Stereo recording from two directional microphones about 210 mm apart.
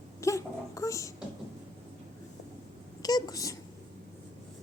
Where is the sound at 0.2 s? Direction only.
15° left (ahead or behind).